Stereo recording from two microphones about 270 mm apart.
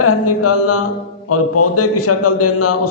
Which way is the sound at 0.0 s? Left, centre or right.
Left.